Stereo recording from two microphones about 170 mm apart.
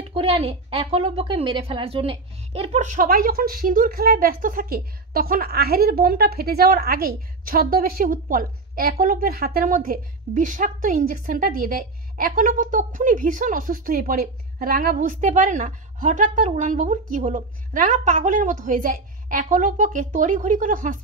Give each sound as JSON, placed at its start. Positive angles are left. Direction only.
{"t": 0.0, "sound": "a woman's voice", "side_deg": -35}